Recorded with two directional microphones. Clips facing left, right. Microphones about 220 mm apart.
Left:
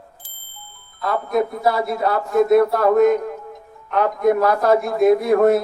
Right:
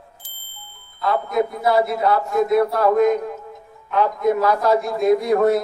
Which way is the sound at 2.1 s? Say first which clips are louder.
Left 7 dB; 50° left (ahead or behind).